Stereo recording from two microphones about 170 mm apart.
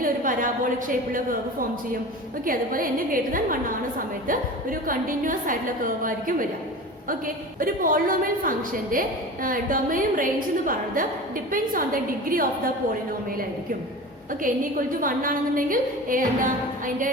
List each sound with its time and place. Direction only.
0.0 s a woman's voice: 50° right (ahead or behind)
7.6 s a woman's voice: 55° right (ahead or behind)
11.5 s a woman's voice: 55° right (ahead or behind)
14.4 s a woman's voice: 55° right (ahead or behind)